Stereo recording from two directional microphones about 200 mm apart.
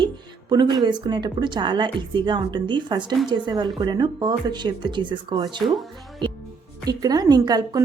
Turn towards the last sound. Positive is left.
turn(degrees=-20)  # may be behind; listen again after turning